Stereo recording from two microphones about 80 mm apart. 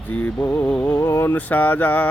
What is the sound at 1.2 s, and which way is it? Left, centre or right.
Mantra, left.